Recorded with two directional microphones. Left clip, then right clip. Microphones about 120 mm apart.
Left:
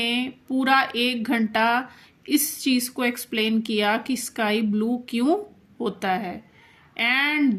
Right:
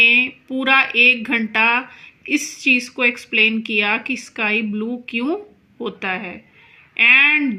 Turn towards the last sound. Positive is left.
turn(degrees=35)  # may be behind; listen again after turning